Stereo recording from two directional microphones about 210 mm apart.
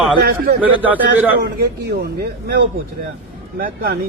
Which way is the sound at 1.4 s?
45° right (ahead or behind).